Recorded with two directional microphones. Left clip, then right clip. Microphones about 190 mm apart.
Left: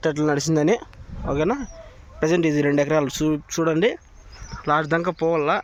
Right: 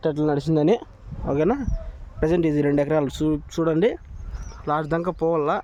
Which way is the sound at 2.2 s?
10° right (ahead or behind).